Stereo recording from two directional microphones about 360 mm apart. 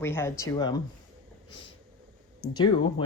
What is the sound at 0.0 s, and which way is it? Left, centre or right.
Speech, centre.